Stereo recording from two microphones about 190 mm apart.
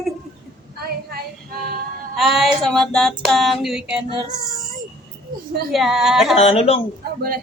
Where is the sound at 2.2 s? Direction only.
Centre (ahead or behind).